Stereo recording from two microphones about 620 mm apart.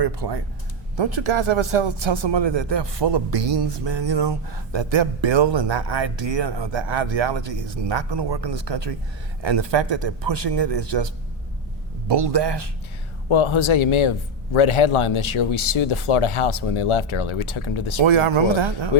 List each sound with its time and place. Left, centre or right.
0.0 s a man's voice: right
13.2 s speech: left
18.0 s speech: right